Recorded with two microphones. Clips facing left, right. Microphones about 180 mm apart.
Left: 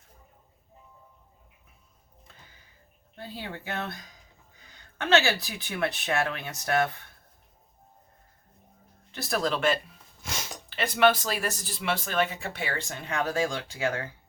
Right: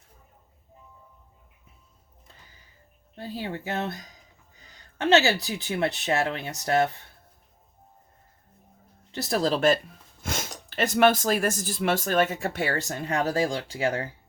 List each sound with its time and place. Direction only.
3.2 s speech: 30° right (ahead or behind)
4.9 s speech: 25° right (ahead or behind)
9.1 s speech: 30° right (ahead or behind)
10.2 s speech: 50° right (ahead or behind); by 14.1 s 35° right (ahead or behind)